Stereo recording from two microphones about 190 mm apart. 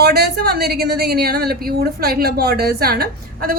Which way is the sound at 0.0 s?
55° right (ahead or behind).